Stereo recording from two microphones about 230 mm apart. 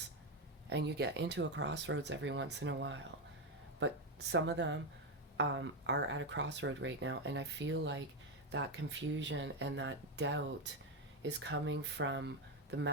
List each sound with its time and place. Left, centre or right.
0.7 s speech: right